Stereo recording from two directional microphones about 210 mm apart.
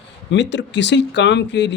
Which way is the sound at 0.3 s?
55° left (ahead or behind).